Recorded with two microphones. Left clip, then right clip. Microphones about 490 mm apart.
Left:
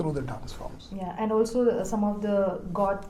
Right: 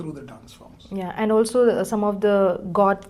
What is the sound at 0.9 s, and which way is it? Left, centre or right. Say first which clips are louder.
Speech: right 6 dB; right.